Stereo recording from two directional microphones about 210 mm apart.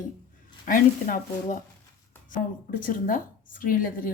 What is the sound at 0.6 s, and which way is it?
A woman's voice, 40° left (ahead or behind).